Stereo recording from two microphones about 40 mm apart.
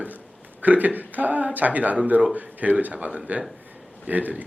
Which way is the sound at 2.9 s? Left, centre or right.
Right.